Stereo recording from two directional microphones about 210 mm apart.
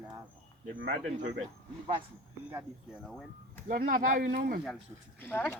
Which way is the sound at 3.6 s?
40° right (ahead or behind).